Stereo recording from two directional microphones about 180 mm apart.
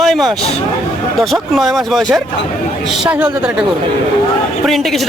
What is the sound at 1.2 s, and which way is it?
A man's voice, centre (ahead or behind).